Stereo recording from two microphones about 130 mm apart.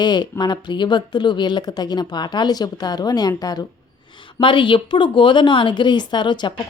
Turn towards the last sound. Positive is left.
turn(degrees=35)  # may be behind; listen again after turning